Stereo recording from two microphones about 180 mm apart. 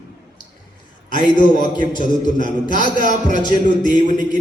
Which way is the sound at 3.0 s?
45° right (ahead or behind).